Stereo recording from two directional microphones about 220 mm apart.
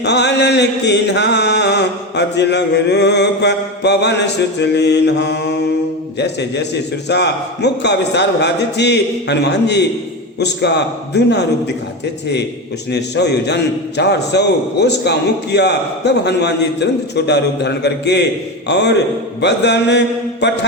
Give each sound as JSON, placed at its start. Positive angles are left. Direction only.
{"t": 0.0, "sound": "mantra", "side_deg": 50}
{"t": 4.6, "sound": "a man's voice", "side_deg": 50}
{"t": 12.9, "sound": "a man's voice", "side_deg": 50}